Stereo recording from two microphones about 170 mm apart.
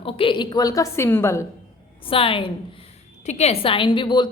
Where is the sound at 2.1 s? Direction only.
30° left (ahead or behind).